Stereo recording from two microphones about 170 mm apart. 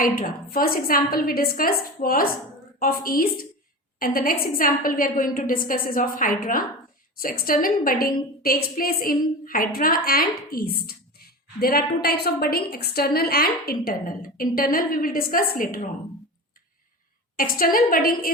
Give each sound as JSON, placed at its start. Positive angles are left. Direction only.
{"t": 0.0, "sound": "a woman's voice", "side_deg": 55}
{"t": 17.3, "sound": "a woman's voice", "side_deg": 60}